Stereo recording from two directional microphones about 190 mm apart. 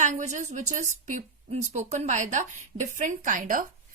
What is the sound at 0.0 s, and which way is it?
A woman's voice, 40° right (ahead or behind).